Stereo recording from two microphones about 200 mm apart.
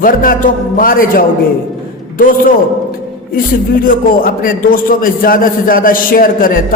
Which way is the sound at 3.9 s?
45° left (ahead or behind).